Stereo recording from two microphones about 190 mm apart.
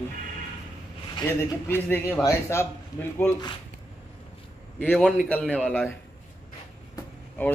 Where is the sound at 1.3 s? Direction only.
10° left (ahead or behind).